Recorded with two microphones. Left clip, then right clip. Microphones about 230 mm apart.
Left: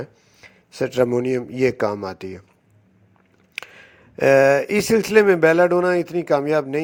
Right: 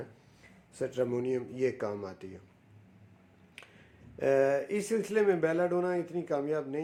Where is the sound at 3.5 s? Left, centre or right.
Left.